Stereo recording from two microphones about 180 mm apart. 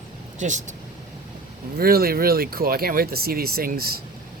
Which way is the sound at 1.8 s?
55° right (ahead or behind).